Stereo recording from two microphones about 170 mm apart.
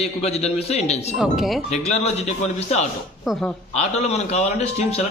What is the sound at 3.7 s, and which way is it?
Speech, 40° left (ahead or behind).